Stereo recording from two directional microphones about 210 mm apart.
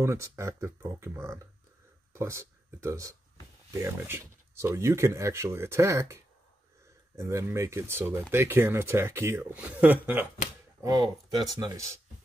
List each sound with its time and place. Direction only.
0.0 s speech: 15° right (ahead or behind)